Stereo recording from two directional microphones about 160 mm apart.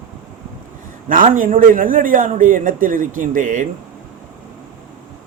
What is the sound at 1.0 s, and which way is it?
A man's voice, 60° right (ahead or behind).